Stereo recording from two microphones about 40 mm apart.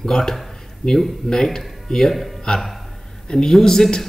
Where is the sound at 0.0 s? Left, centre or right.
Centre.